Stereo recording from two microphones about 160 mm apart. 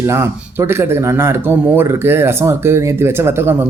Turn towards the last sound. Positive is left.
turn(degrees=-15)  # may be behind; listen again after turning